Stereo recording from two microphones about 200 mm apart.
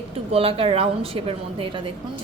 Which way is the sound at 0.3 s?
30° right (ahead or behind).